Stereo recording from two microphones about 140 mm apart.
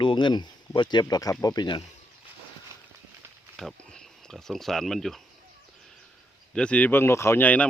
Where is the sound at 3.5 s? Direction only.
5° left (ahead or behind).